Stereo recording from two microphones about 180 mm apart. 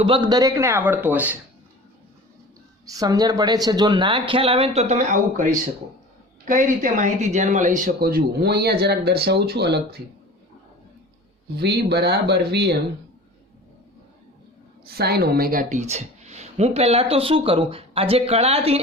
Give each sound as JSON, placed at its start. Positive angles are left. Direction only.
{"t": 0.0, "sound": "speech", "side_deg": -25}
{"t": 2.8, "sound": "speech", "side_deg": -20}
{"t": 11.5, "sound": "speech", "side_deg": -65}
{"t": 14.8, "sound": "a woman's voice", "side_deg": -60}